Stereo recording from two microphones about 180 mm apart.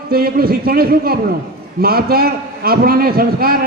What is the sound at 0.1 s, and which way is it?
A man's voice, 55° right (ahead or behind).